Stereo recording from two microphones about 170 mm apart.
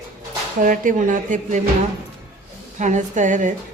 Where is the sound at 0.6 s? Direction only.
50° right (ahead or behind).